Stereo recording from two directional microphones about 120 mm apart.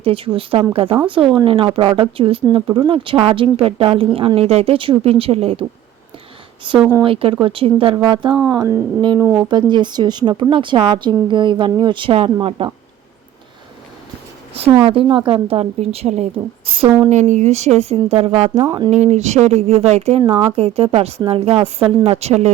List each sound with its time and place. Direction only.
0.0 s speech: 50° right (ahead or behind)
0.9 s speech: 20° right (ahead or behind)
1.1 s speech: 45° right (ahead or behind)
6.6 s a woman's voice: 45° right (ahead or behind)
8.4 s speech: 25° right (ahead or behind)
9.5 s a woman's voice: 40° right (ahead or behind)
14.6 s speech: 55° right (ahead or behind)
17.1 s speech: 80° right; by 18.5 s 60° right (ahead or behind)
18.9 s speech: 70° right (ahead or behind)
20.2 s speech: 50° right (ahead or behind)